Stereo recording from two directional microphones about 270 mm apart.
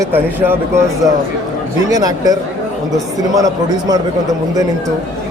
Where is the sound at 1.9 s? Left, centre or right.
Centre.